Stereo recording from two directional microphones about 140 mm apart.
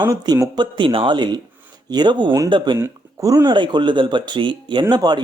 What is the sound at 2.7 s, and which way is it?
Speech, 20° right (ahead or behind).